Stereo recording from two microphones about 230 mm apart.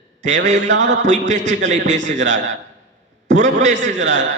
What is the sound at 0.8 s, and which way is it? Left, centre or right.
A man's voice, right.